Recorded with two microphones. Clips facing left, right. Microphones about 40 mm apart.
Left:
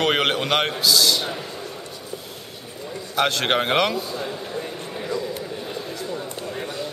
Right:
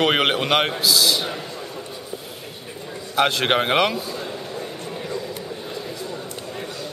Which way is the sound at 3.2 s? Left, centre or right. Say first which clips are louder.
Right 2 dB; centre.